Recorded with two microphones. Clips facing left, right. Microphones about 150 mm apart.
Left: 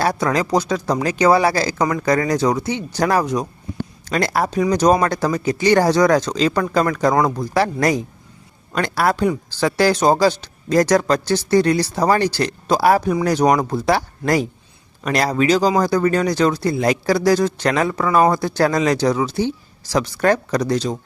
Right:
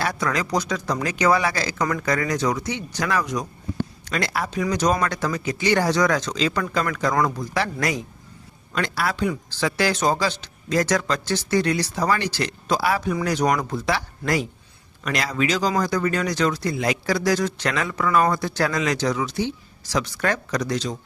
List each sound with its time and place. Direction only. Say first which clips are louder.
0.0 s speech: left 6 dB; 35° left (ahead or behind)